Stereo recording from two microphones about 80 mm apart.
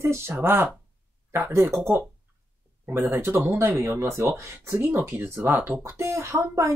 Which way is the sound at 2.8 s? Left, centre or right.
Right.